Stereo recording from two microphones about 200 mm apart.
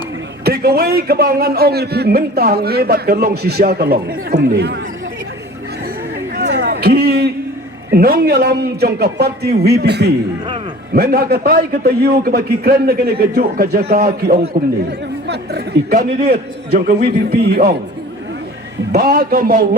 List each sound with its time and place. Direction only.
0.4 s a man's voice: 50° right (ahead or behind)
6.3 s a sound: 55° right (ahead or behind)
7.9 s a man's voice: 50° right (ahead or behind)
18.9 s a man's voice: 45° right (ahead or behind)